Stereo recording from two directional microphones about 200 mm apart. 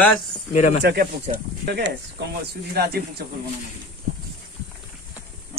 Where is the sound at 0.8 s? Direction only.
55° right (ahead or behind).